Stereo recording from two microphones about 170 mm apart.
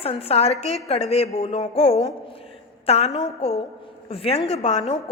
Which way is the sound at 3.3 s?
40° left (ahead or behind).